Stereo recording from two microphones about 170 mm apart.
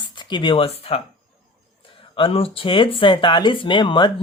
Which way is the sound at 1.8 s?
30° left (ahead or behind).